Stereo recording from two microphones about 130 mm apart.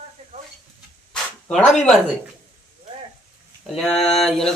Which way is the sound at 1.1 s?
5° left (ahead or behind).